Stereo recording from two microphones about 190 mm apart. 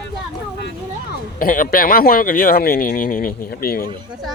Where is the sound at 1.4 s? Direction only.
50° left (ahead or behind).